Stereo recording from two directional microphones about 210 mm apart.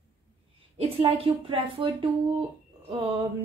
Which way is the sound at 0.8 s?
25° right (ahead or behind).